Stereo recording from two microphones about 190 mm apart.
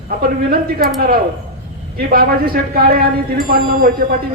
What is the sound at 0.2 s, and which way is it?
Speech, 50° right (ahead or behind).